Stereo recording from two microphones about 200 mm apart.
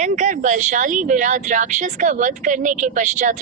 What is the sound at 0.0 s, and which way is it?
A woman's voice, 40° right (ahead or behind).